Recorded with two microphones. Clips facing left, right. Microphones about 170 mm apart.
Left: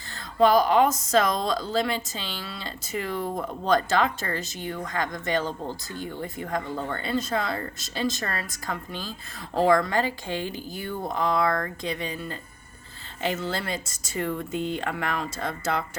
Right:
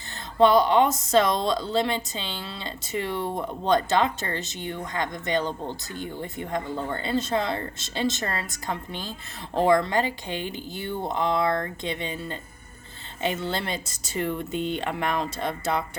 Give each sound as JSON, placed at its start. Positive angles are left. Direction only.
{"t": 0.3, "sound": "speech", "side_deg": -25}